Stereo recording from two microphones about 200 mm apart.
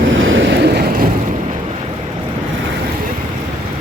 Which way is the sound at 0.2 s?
75° right (ahead or behind).